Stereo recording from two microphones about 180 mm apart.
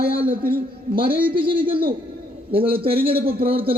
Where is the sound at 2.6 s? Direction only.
55° right (ahead or behind).